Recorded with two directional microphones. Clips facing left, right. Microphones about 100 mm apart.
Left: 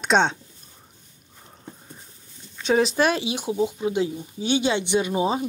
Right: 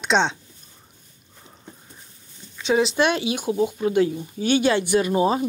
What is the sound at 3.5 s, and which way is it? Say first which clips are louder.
Speech: right 2 dB; 10° left (ahead or behind).